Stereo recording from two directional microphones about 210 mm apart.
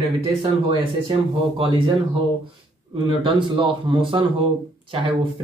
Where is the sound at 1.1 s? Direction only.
25° right (ahead or behind).